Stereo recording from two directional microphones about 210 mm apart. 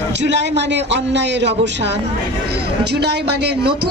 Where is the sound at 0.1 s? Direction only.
55° right (ahead or behind).